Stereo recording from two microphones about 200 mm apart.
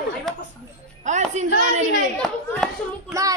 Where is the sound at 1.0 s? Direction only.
35° right (ahead or behind).